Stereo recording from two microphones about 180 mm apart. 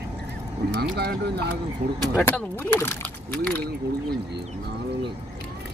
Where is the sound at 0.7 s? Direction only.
65° right (ahead or behind).